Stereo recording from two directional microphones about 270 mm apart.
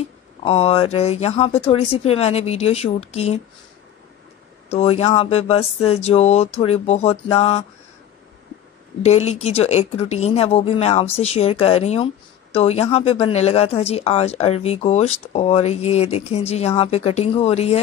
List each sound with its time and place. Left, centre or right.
0.4 s speech: left
4.6 s speech: left
9.0 s speech: left